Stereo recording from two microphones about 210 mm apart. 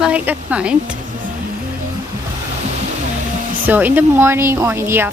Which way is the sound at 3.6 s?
10° right (ahead or behind).